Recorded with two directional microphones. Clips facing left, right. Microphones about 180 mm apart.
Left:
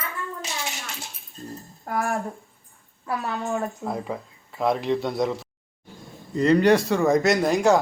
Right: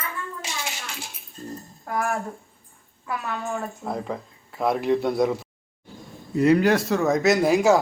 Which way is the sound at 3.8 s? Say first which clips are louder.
Even; centre (ahead or behind).